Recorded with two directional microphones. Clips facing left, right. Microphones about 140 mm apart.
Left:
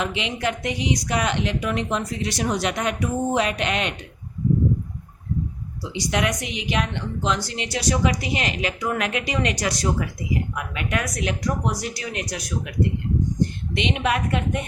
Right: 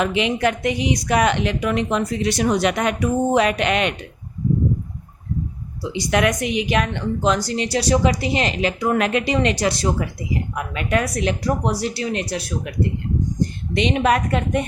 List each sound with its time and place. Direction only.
0.0 s a woman's voice: 55° right (ahead or behind)
5.8 s a woman's voice: 55° right (ahead or behind); by 12.7 s 30° right (ahead or behind)
13.7 s a woman's voice: 40° right (ahead or behind)